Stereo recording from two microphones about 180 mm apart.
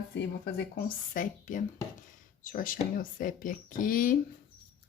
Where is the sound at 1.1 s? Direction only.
50° left (ahead or behind).